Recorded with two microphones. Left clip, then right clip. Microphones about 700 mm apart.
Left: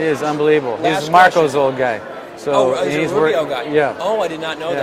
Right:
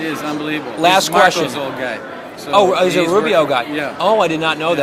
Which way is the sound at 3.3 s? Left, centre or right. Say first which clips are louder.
Right 2 dB; right.